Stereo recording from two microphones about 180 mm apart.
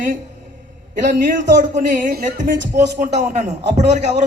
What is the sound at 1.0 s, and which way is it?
A man's voice, 45° right (ahead or behind).